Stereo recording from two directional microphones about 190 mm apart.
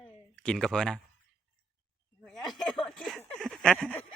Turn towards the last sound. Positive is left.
turn(degrees=5)  # may be behind; listen again after turning